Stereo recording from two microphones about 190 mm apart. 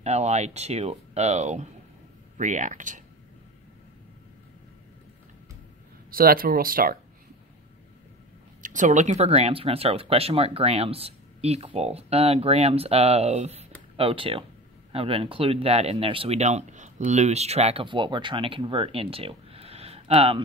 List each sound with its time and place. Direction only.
0.0 s speech: 35° right (ahead or behind)
6.0 s speech: 50° right (ahead or behind)
8.6 s speech: 40° right (ahead or behind)